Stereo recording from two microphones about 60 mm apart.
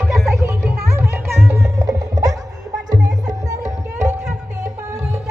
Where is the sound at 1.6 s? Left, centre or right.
Right.